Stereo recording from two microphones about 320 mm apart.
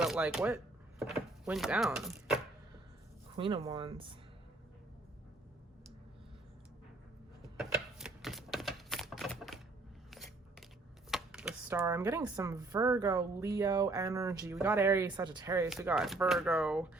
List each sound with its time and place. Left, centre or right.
0.0 s speech: centre
3.3 s speech: centre
7.5 s a sound: centre
11.1 s speech: centre